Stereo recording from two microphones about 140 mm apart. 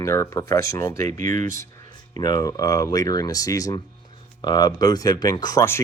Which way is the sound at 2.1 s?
30° left (ahead or behind).